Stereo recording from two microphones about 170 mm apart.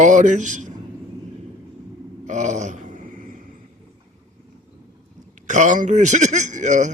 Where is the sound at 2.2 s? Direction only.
45° right (ahead or behind).